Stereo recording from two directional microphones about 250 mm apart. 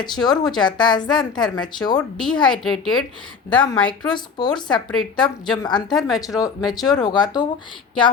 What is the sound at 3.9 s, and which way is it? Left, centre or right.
Speech, centre.